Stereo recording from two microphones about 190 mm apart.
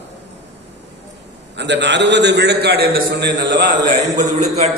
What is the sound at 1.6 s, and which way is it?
A man's voice, 65° right (ahead or behind).